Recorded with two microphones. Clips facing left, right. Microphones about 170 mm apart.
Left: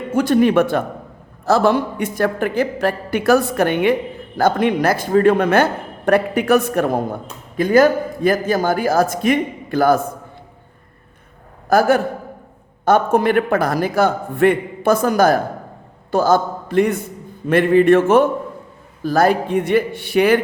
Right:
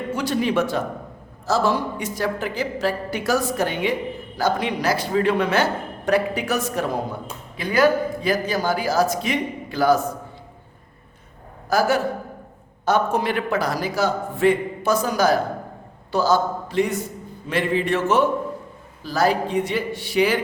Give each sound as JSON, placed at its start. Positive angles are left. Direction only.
{"t": 0.1, "sound": "a woman's voice", "side_deg": 50}
{"t": 11.7, "sound": "a man's voice", "side_deg": 55}